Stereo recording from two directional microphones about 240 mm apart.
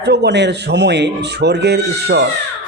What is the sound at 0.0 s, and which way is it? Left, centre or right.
A man's voice, right.